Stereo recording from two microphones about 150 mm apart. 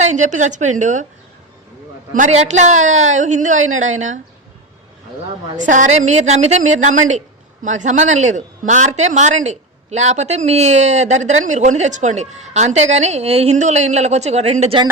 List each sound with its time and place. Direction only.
0.0 s speech: 55° right (ahead or behind)
2.1 s speech: 55° right (ahead or behind)
5.5 s a woman's voice: 55° right (ahead or behind)